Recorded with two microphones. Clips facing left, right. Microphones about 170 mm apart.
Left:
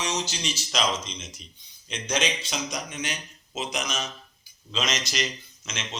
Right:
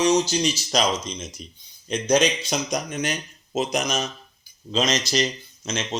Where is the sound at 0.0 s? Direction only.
40° right (ahead or behind).